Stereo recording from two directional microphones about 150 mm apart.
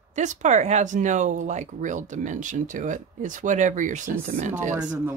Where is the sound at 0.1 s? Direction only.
50° right (ahead or behind).